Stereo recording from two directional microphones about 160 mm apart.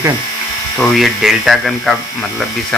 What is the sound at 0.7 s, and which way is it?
Speech, centre (ahead or behind).